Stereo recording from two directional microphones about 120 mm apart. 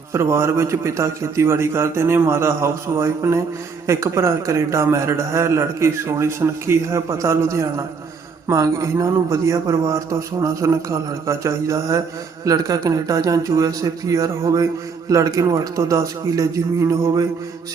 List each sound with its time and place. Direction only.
0.1 s a man's voice: 20° right (ahead or behind)